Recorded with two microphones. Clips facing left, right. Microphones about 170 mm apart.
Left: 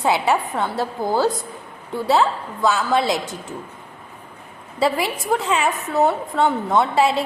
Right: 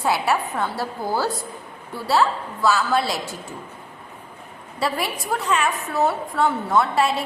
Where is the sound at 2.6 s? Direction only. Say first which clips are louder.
Even; 20° left (ahead or behind).